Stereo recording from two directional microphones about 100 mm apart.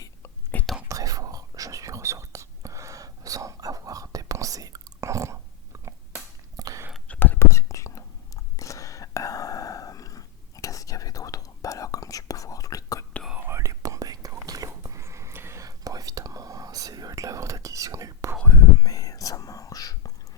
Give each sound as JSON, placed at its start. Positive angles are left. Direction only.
{"t": 0.5, "sound": "whispering", "side_deg": 20}
{"t": 0.9, "sound": "whispering", "side_deg": -35}
{"t": 7.1, "sound": "whispering", "side_deg": 20}
{"t": 7.4, "sound": "whispering", "side_deg": 30}
{"t": 13.5, "sound": "whispering", "side_deg": -30}
{"t": 18.4, "sound": "whispering", "side_deg": 35}